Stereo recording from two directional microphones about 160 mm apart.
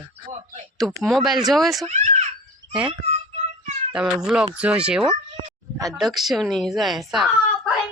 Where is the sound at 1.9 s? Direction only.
45° right (ahead or behind).